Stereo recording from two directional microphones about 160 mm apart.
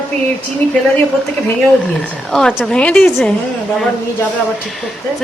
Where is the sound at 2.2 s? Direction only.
Centre (ahead or behind).